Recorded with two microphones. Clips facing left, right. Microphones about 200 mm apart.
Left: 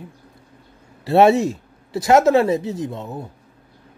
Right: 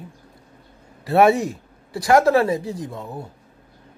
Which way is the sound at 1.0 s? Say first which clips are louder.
Left 2 dB; 25° left (ahead or behind).